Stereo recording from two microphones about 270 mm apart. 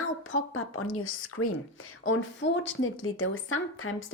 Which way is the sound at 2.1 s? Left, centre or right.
Left.